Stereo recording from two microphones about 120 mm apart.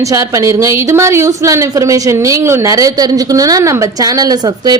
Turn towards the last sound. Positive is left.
turn(degrees=-35)  # may be behind; listen again after turning